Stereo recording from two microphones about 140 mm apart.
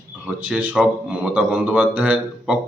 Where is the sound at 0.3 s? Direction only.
10° right (ahead or behind).